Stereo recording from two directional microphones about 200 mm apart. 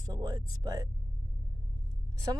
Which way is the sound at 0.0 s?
20° right (ahead or behind).